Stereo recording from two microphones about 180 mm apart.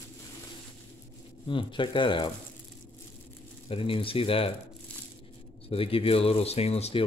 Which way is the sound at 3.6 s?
30° left (ahead or behind).